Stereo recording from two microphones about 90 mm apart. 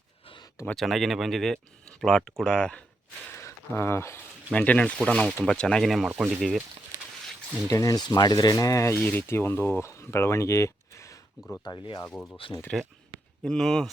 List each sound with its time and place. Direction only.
0.8 s speech: centre (ahead or behind)
3.2 s speech: 25° left (ahead or behind)
4.5 s speech: 15° left (ahead or behind)
6.1 s speech: 10° right (ahead or behind)
6.9 s a sound: 40° right (ahead or behind)
7.7 s speech: 40° left (ahead or behind)
9.0 s speech: 15° left (ahead or behind)
9.2 s speech: 25° left (ahead or behind)
11.6 s speech: 50° left (ahead or behind)
12.4 s speech: 80° left
13.4 s speech: 5° left (ahead or behind)